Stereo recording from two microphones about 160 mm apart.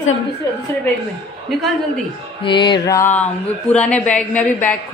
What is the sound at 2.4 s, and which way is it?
Speech, 30° left (ahead or behind).